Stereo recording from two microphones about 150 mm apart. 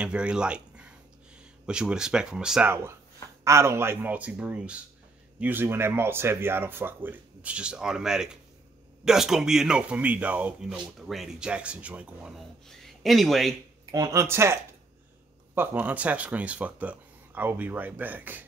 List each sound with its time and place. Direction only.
0.0 s speech: 5° right (ahead or behind)
2.7 s speech: 15° right (ahead or behind); by 13.6 s centre (ahead or behind)
13.9 s speech: 20° right (ahead or behind)